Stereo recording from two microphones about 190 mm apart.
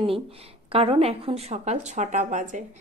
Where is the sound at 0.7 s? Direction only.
30° right (ahead or behind).